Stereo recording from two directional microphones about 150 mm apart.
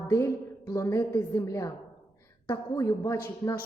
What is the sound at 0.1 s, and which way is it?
A woman's voice, 20° left (ahead or behind).